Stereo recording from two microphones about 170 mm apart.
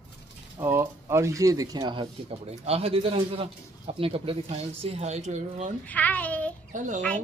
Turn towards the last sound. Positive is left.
turn(degrees=-50)  # may be behind; listen again after turning